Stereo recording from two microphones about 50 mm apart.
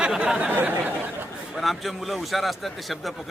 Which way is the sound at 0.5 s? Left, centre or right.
Right.